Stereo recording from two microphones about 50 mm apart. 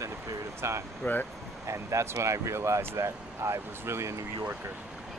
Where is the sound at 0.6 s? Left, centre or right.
Right.